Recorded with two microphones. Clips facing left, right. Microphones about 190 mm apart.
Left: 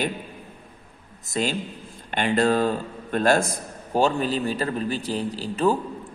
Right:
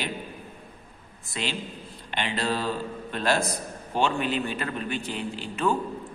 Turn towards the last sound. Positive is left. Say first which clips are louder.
# left 4 dB
turn(degrees=35)  # may be behind; listen again after turning